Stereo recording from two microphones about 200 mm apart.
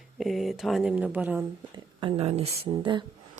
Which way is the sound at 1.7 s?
25° right (ahead or behind).